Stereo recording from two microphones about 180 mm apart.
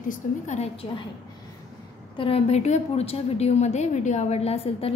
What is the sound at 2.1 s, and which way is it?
A woman's voice, 30° left (ahead or behind).